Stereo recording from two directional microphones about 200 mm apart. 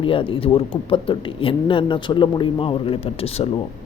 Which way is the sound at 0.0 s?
25° left (ahead or behind).